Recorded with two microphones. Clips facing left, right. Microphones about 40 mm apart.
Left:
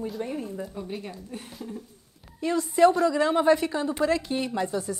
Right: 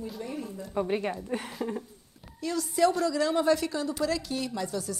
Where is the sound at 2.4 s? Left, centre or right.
Left.